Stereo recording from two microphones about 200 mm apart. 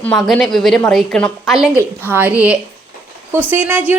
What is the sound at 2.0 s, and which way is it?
A woman's voice, 10° right (ahead or behind).